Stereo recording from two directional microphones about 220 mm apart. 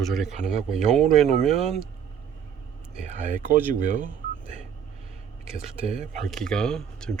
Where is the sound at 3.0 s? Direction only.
35° right (ahead or behind).